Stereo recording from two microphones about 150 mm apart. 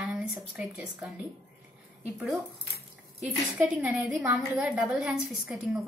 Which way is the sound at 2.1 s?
Centre (ahead or behind).